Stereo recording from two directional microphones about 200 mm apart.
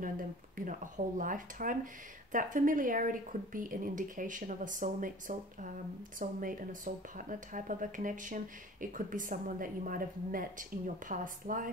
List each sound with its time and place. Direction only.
0.7 s a woman's voice: 40° right (ahead or behind)